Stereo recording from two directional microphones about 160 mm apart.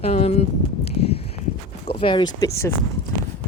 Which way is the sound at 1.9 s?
30° left (ahead or behind).